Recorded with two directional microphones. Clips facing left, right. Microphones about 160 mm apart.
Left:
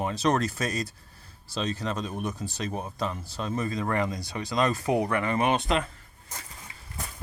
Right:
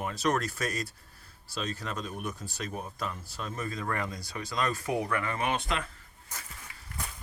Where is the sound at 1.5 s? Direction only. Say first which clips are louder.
Left 5 dB; 90° left.